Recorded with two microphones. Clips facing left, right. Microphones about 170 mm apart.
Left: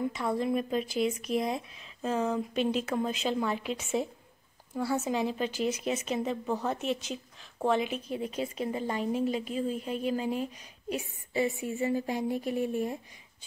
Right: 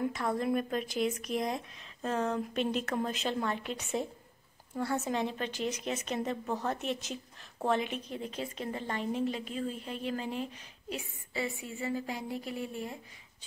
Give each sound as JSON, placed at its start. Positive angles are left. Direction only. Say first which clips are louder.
{"t": 0.1, "sound": "a woman's voice", "louder": "left 2 dB", "side_deg": 0}